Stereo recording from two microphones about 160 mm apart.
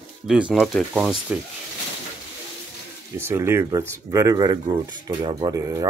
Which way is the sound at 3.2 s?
15° right (ahead or behind).